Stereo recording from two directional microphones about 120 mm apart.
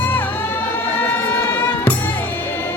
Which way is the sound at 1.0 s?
15° left (ahead or behind).